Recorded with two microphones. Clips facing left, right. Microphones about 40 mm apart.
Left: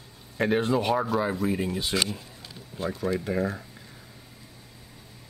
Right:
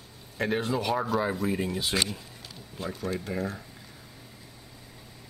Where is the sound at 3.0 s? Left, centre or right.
Left.